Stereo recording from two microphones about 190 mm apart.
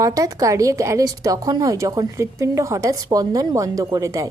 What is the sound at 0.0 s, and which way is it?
A woman's voice, 15° right (ahead or behind).